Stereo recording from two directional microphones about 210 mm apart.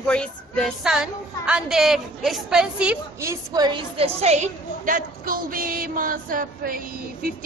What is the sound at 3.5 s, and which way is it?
A woman's voice, 20° right (ahead or behind).